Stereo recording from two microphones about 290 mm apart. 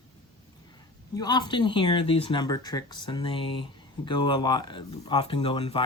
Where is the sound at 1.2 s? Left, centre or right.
Centre.